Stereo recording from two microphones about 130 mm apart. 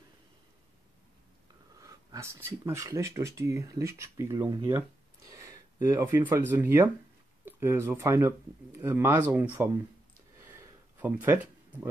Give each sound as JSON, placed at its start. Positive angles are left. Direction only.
{"t": 1.8, "sound": "speech", "side_deg": -25}
{"t": 4.6, "sound": "a sound", "side_deg": -20}
{"t": 6.5, "sound": "speech", "side_deg": -20}
{"t": 11.0, "sound": "speech", "side_deg": -15}